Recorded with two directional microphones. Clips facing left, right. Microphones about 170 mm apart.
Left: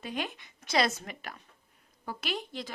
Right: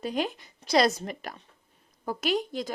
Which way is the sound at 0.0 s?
40° right (ahead or behind).